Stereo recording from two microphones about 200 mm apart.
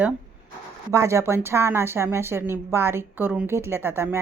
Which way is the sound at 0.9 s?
15° right (ahead or behind).